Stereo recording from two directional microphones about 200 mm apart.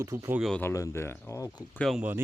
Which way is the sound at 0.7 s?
15° left (ahead or behind).